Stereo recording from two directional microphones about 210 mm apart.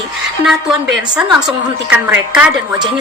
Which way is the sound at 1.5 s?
5° right (ahead or behind).